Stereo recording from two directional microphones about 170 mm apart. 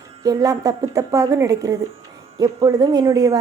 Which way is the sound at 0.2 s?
20° right (ahead or behind).